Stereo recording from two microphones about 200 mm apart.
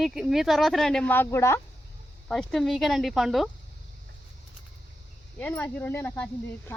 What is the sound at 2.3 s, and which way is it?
Speech, centre (ahead or behind).